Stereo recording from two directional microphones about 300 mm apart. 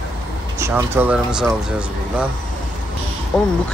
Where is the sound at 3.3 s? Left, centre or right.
Centre.